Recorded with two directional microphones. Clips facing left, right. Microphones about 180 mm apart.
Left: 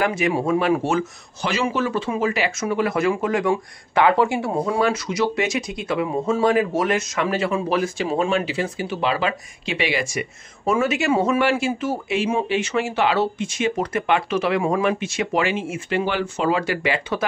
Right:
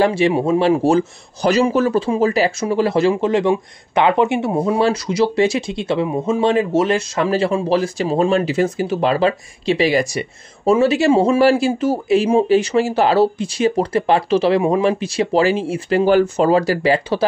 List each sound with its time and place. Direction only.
0.0 s speech: 30° right (ahead or behind)